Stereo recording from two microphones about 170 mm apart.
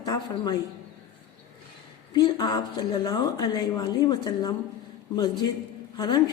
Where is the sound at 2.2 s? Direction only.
25° left (ahead or behind).